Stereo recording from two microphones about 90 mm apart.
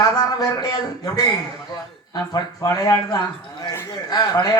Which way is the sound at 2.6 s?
40° left (ahead or behind).